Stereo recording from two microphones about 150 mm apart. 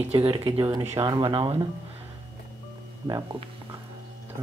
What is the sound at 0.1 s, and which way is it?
Speech, 35° right (ahead or behind).